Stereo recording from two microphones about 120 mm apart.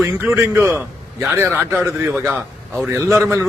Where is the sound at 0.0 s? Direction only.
20° right (ahead or behind).